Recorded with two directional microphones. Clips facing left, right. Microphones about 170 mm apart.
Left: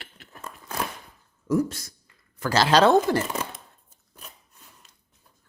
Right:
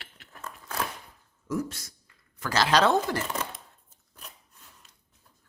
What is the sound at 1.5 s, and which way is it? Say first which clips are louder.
Speech: left 7 dB; 35° left (ahead or behind).